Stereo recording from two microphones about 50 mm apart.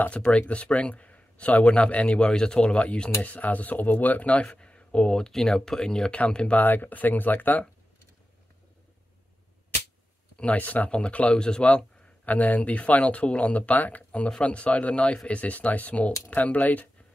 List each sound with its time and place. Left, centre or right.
0.1 s speech: centre
2.1 s speech: centre
3.2 s speech: left
4.5 s speech: centre
5.3 s speech: centre
6.5 s speech: left
10.3 s speech: left
11.6 s speech: left